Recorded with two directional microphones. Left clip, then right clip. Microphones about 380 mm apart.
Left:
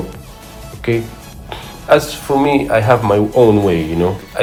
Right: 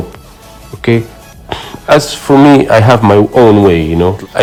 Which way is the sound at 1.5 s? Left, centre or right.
Right.